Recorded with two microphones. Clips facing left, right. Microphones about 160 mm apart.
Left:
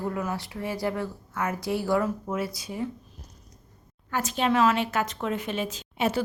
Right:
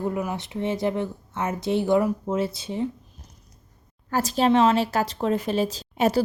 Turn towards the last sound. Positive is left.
turn(degrees=-35)  # may be behind; listen again after turning